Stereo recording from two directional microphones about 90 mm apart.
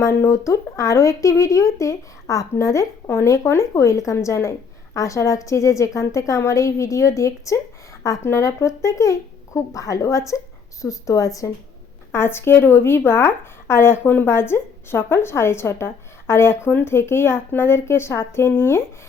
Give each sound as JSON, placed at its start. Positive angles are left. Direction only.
{"t": 0.0, "sound": "speech", "side_deg": 30}
{"t": 12.1, "sound": "speech", "side_deg": 25}